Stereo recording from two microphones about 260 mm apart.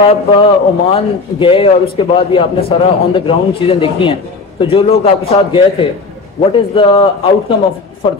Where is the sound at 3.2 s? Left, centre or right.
Left.